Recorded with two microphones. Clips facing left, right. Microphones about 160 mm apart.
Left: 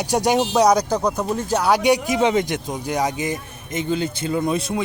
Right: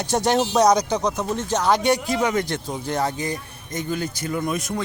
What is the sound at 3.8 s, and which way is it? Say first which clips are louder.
Speech: left 4 dB; 25° left (ahead or behind).